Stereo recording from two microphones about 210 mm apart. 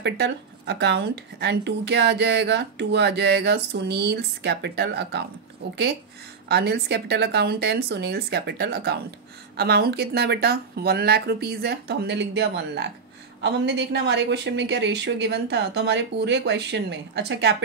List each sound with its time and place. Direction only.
0.0 s speech: 55° right (ahead or behind)
6.5 s speech: 50° right (ahead or behind)